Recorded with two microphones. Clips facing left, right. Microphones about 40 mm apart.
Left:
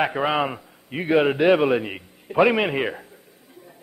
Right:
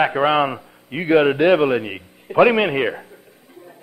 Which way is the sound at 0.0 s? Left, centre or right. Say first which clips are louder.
Right 5 dB; centre.